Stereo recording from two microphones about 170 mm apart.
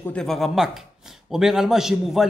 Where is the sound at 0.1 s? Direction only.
Centre (ahead or behind).